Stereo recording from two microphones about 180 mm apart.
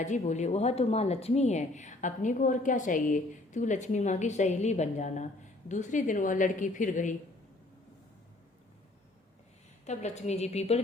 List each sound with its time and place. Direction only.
0.0 s speech: 40° left (ahead or behind)
9.8 s speech: 40° left (ahead or behind)